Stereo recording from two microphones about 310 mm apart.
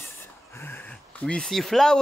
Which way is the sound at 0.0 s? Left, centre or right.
Centre.